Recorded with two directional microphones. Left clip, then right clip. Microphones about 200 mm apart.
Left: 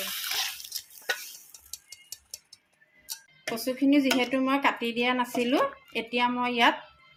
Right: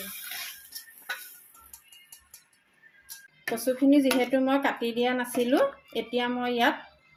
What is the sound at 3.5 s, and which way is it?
Speech, 10° left (ahead or behind).